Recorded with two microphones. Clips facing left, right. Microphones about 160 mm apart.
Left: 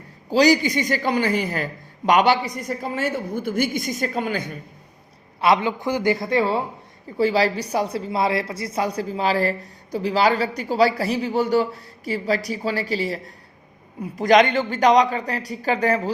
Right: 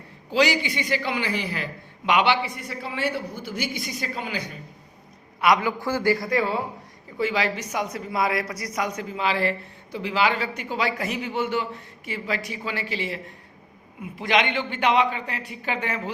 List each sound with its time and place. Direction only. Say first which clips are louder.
0.3 s a man's voice: left 6 dB; 40° left (ahead or behind)
5.4 s a man's voice: left 2 dB; 30° left (ahead or behind)